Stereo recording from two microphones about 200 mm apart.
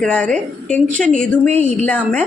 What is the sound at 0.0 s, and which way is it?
A woman's voice, 5° left (ahead or behind).